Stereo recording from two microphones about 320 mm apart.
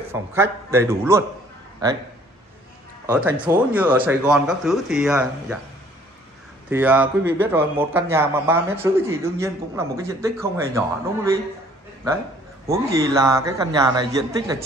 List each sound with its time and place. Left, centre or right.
0.1 s a man's voice: centre
3.1 s speech: centre
6.7 s a man's voice: centre
12.6 s a man's voice: centre